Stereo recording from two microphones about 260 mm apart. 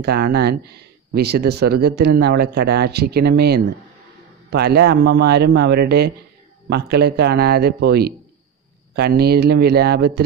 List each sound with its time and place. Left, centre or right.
0.0 s speech: right